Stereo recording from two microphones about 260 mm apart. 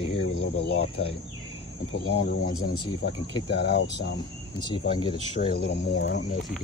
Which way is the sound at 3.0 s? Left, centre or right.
Left.